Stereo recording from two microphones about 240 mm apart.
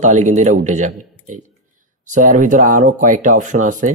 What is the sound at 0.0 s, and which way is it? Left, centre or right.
Speech, right.